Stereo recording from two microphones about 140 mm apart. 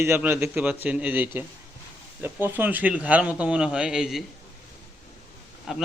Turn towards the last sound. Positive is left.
turn(degrees=-5)  # may be behind; listen again after turning